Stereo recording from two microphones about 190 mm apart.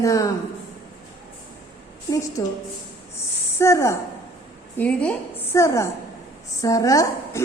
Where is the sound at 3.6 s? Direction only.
15° left (ahead or behind).